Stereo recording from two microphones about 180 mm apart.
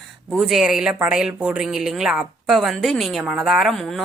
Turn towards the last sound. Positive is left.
turn(degrees=0)  # may be behind; listen again after turning